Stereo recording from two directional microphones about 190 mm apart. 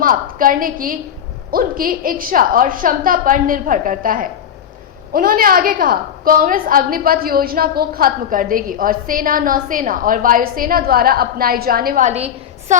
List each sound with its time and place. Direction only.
0.0 s a woman's voice: 50° right (ahead or behind)